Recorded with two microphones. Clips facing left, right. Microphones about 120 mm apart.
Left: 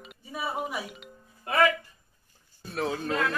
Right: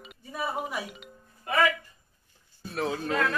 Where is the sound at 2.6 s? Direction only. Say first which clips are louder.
Even; centre (ahead or behind).